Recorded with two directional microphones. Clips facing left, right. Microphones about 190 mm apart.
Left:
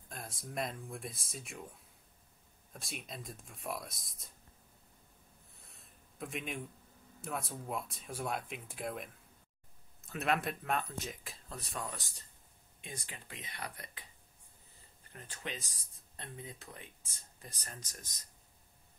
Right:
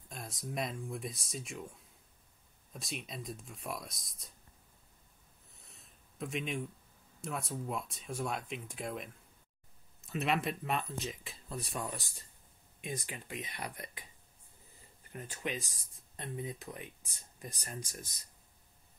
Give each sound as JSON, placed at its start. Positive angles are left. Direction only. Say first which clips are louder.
{"t": 0.1, "sound": "speech", "louder": "right 2 dB", "side_deg": 0}
{"t": 2.7, "sound": "speech", "louder": "right 3 dB", "side_deg": 0}
{"t": 5.6, "sound": "a sound", "louder": "right 1 dB", "side_deg": 0}
{"t": 7.2, "sound": "speech", "louder": "right 2 dB", "side_deg": 0}
{"t": 11.5, "sound": "speech", "louder": "right 3 dB", "side_deg": -15}
{"t": 15.4, "sound": "speech", "louder": "right 5 dB", "side_deg": -15}